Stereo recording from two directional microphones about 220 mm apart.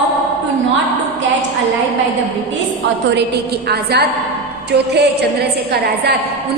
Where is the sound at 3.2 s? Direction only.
50° right (ahead or behind).